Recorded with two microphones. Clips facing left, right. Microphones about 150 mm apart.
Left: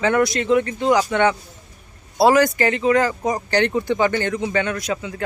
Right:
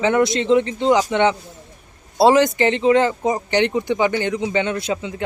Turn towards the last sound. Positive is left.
turn(degrees=-20)  # may be behind; listen again after turning